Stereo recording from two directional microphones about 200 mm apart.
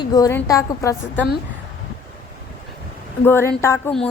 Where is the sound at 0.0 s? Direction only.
20° left (ahead or behind).